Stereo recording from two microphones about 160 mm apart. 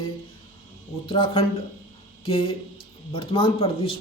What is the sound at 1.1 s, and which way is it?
Speech, 30° left (ahead or behind).